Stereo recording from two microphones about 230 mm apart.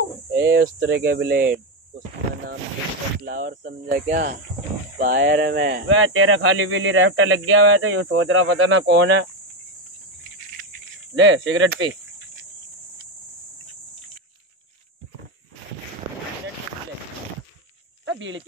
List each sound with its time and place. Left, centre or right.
0.3 s speech: right
3.3 s speech: right
5.0 s speech: right
11.1 s speech: right
18.0 s a sound: right